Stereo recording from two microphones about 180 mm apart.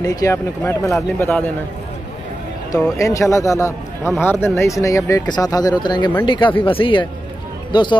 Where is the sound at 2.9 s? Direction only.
15° left (ahead or behind).